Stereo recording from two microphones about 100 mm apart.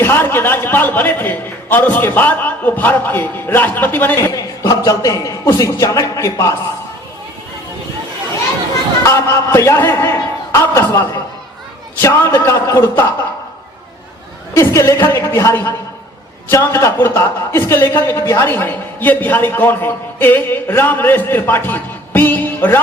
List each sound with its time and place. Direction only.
0.0 s a man's voice: 20° left (ahead or behind)
4.3 s a man's voice: 35° left (ahead or behind)
9.0 s a man's voice: 30° left (ahead or behind)
14.5 s a man's voice: 30° left (ahead or behind)